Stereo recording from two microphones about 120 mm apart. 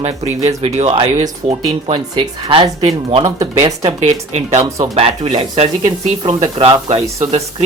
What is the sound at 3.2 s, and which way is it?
Speech, 25° right (ahead or behind).